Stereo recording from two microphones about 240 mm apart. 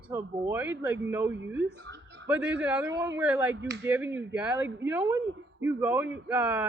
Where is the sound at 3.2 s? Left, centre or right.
Centre.